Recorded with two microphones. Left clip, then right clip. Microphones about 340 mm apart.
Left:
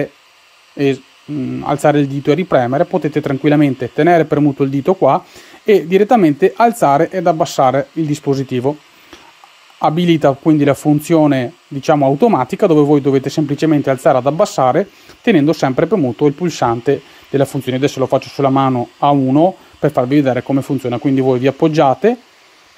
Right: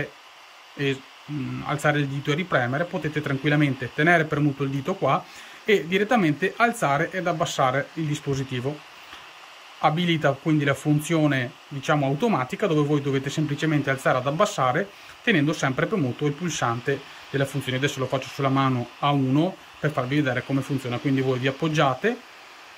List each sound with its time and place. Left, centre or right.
1.7 s speech: centre
9.8 s speech: centre
16.8 s speech: left
17.4 s speech: centre